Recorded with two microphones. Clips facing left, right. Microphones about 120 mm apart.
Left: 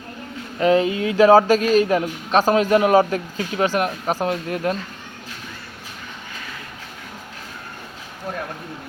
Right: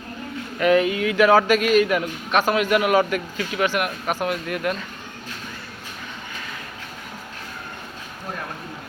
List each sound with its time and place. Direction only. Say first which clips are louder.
0.6 s a man's voice: left 1 dB; 25° left (ahead or behind)